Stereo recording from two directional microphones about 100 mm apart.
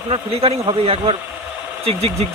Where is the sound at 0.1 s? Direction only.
80° right.